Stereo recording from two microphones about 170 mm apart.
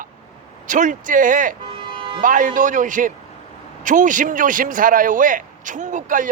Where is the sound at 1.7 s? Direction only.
30° right (ahead or behind).